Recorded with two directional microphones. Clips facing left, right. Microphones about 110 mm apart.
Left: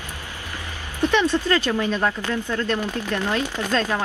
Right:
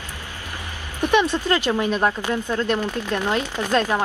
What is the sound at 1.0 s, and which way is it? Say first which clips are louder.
Speech: right 1 dB; 15° right (ahead or behind).